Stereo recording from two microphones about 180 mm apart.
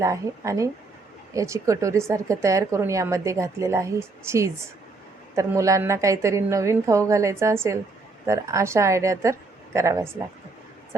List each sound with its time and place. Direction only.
0.0 s speech: 15° right (ahead or behind)